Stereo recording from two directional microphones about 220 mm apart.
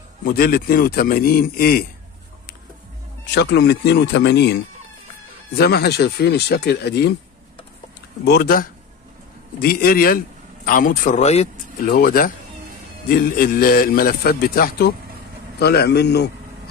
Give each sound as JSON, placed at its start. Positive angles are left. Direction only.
{"t": 0.2, "sound": "a man's voice", "side_deg": 40}
{"t": 3.3, "sound": "a man's voice", "side_deg": 50}
{"t": 5.6, "sound": "a man's voice", "side_deg": 45}
{"t": 8.3, "sound": "a man's voice", "side_deg": 45}
{"t": 11.9, "sound": "a man's voice", "side_deg": 40}